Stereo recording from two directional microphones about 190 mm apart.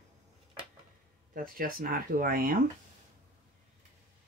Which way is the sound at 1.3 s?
50° right (ahead or behind).